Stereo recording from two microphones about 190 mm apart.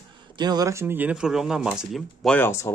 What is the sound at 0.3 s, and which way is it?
Speech, 20° right (ahead or behind).